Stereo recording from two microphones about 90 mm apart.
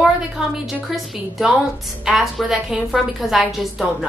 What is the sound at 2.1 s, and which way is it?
A woman's voice, 5° right (ahead or behind).